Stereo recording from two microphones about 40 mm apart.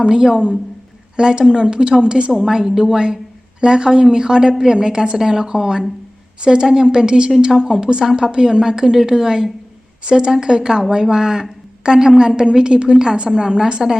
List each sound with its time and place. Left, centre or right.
0.0 s a woman's voice: centre
2.3 s a woman's voice: centre